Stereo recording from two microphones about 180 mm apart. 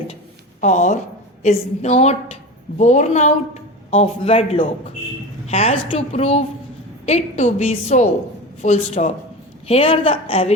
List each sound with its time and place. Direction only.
0.6 s a woman's voice: 40° left (ahead or behind)